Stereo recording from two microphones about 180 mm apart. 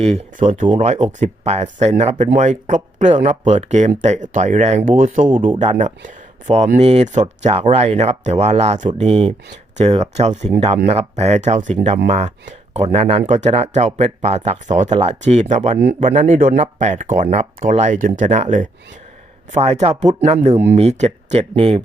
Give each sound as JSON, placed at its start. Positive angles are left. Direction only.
{"t": 0.0, "sound": "speech", "side_deg": -35}
{"t": 6.1, "sound": "a sound", "side_deg": -40}
{"t": 6.7, "sound": "speech", "side_deg": -35}